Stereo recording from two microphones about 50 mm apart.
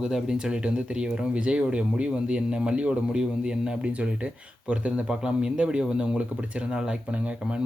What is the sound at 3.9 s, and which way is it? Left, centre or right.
Speech, right.